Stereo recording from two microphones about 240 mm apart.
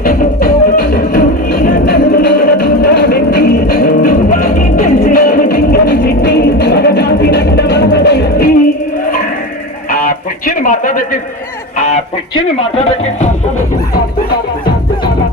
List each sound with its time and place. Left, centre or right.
0.0 s music: left
9.9 s music: left
12.3 s speech: left